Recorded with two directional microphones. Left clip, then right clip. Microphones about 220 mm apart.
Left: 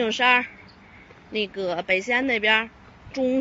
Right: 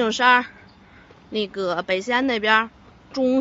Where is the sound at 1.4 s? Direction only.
30° right (ahead or behind).